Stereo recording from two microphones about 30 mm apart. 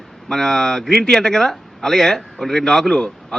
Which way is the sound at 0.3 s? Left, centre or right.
Centre.